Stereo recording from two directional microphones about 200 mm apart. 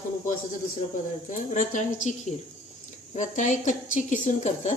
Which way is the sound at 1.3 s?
40° left (ahead or behind).